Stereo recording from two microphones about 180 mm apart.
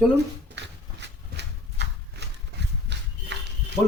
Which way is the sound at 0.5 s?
75° right (ahead or behind).